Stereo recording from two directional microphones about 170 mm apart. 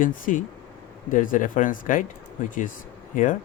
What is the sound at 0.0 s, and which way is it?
Speech, 50° left (ahead or behind).